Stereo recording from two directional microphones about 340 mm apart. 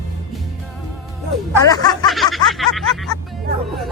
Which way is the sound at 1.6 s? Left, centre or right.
Centre.